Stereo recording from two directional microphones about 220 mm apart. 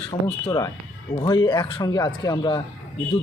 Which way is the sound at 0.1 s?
20° left (ahead or behind).